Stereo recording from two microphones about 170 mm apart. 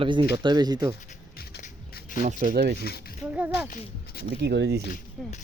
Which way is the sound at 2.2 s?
45° right (ahead or behind).